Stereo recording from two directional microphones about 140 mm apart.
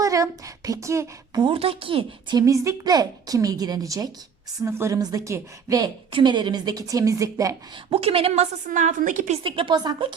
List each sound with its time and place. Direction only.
0.0 s speech: 25° right (ahead or behind); by 2.4 s 40° right (ahead or behind)
2.4 s speech: 20° right (ahead or behind)
6.1 s speech: 35° right (ahead or behind)
7.9 s a woman's voice: 40° right (ahead or behind); by 9.4 s 60° right (ahead or behind)
9.4 s a woman's voice: 35° right (ahead or behind)